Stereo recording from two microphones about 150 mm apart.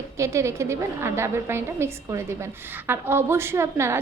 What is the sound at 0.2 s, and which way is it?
A woman's voice, 20° right (ahead or behind).